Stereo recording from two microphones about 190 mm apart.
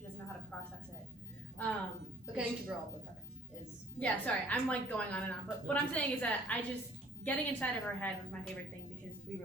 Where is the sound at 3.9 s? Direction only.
5° left (ahead or behind).